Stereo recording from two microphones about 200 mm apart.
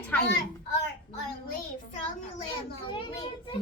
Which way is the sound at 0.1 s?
10° left (ahead or behind).